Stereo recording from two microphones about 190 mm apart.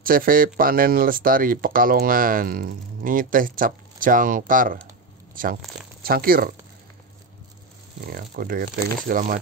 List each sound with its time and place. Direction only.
0.0 s speech: 50° right (ahead or behind)
8.1 s speech: 50° right (ahead or behind)